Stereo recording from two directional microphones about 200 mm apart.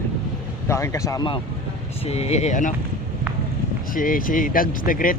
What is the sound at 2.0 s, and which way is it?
Speech, 30° left (ahead or behind).